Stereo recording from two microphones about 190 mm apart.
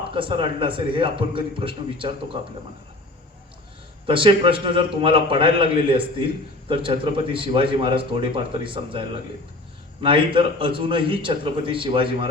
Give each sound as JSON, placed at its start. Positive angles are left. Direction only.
{"t": 0.1, "sound": "a man's voice", "side_deg": -25}
{"t": 4.0, "sound": "a man's voice", "side_deg": -25}